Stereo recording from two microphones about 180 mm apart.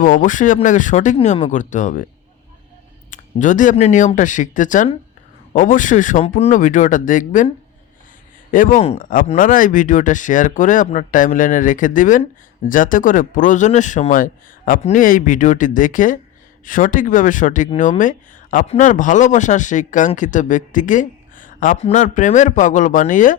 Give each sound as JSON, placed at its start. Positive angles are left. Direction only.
{"t": 0.0, "sound": "speech", "side_deg": 45}
{"t": 3.1, "sound": "speech", "side_deg": 45}